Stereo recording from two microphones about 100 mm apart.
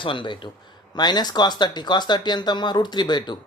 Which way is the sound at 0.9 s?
45° left (ahead or behind).